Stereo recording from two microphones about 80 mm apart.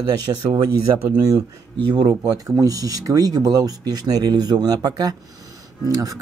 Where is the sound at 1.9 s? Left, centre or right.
Right.